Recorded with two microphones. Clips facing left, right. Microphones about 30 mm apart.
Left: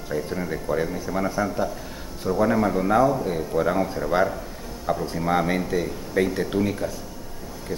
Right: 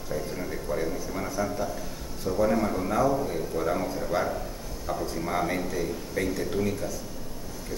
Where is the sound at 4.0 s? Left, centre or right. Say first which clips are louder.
Left 5 dB; left.